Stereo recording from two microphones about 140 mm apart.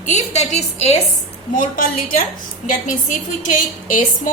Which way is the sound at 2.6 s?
65° left (ahead or behind).